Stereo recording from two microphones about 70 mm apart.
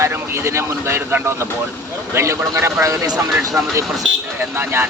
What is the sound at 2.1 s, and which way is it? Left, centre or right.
Speech, right.